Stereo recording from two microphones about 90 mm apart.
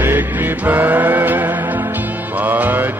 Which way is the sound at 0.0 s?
20° right (ahead or behind).